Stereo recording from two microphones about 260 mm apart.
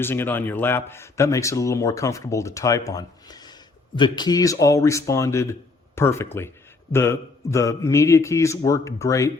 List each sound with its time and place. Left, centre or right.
0.0 s a man's voice: centre